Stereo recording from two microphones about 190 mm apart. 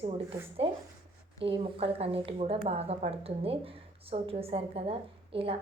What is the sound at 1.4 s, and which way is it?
A woman's voice, 30° right (ahead or behind).